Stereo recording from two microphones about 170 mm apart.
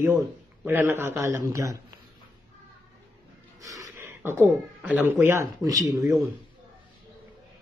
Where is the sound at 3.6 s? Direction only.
20° right (ahead or behind).